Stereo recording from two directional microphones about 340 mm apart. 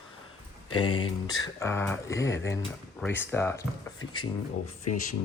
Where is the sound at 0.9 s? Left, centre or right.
Left.